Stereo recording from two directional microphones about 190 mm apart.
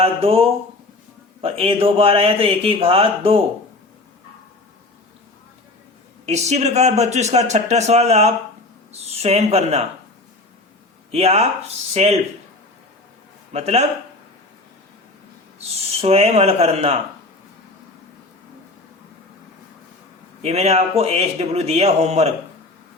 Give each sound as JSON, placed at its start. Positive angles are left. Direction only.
{"t": 0.0, "sound": "speech", "side_deg": -30}
{"t": 6.2, "sound": "speech", "side_deg": -35}
{"t": 11.1, "sound": "speech", "side_deg": -35}
{"t": 13.5, "sound": "speech", "side_deg": -35}
{"t": 16.0, "sound": "speech", "side_deg": -30}
{"t": 20.4, "sound": "speech", "side_deg": -35}